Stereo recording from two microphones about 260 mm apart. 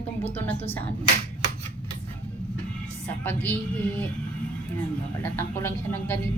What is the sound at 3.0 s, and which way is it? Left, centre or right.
Speech, centre.